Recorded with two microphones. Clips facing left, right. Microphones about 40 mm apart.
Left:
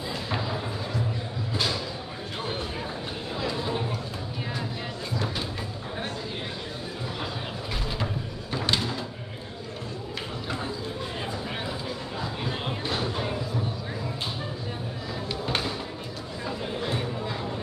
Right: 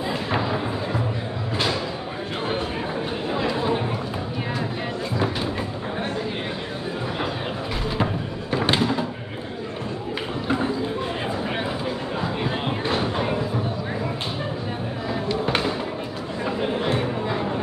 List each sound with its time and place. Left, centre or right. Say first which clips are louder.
0.3 s music: right 6 dB; right
3.3 s chatter: right 6 dB; right
8.0 s music: right 7 dB; right
12.2 s a sound: right 5 dB; right
15.4 s music: right 6 dB; right